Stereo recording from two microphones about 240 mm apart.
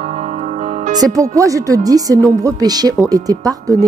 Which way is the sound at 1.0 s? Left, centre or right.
Centre.